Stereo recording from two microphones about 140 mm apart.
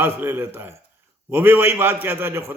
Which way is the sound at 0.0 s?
15° right (ahead or behind).